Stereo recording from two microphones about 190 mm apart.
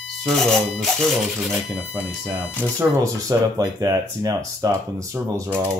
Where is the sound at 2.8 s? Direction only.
15° right (ahead or behind).